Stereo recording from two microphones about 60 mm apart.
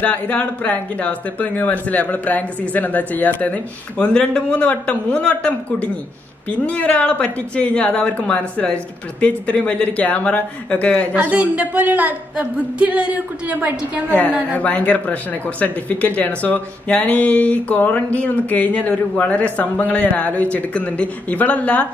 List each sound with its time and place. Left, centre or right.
0.0 s speech: left
11.1 s a woman's voice: right
14.5 s speech: left